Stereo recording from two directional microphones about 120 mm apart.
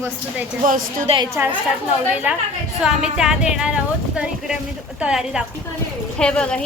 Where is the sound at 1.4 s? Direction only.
15° right (ahead or behind).